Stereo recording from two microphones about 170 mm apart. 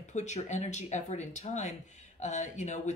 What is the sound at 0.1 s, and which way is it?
Speech, 45° left (ahead or behind).